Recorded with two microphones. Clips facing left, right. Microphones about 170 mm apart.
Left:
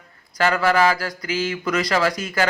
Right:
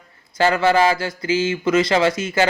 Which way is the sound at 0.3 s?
25° right (ahead or behind).